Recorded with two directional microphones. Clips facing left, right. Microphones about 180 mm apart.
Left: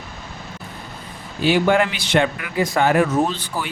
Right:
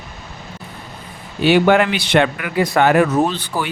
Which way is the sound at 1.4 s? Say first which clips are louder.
Right 4 dB; 70° right (ahead or behind).